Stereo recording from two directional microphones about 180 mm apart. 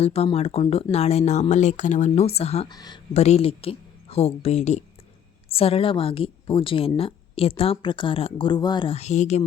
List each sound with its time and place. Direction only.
0.0 s a woman's voice: 35° left (ahead or behind)
2.7 s speech: 20° left (ahead or behind)
3.1 s a woman's voice: 35° left (ahead or behind)